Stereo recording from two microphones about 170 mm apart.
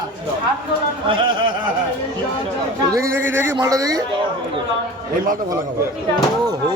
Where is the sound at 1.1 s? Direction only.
30° right (ahead or behind).